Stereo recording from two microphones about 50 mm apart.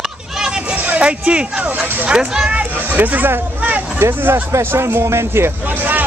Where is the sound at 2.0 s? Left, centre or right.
Centre.